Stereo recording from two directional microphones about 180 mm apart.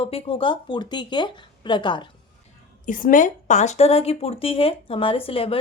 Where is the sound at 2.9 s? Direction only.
50° left (ahead or behind); by 5.5 s 30° left (ahead or behind).